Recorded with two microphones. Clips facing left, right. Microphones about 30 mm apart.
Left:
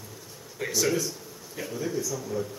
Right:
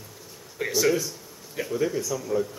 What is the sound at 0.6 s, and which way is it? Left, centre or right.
Speech, centre.